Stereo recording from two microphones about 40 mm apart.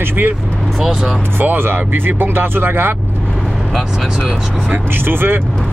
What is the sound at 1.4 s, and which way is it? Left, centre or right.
Speech, right.